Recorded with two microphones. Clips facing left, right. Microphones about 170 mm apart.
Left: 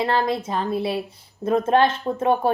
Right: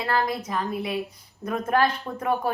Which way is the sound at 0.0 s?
25° left (ahead or behind).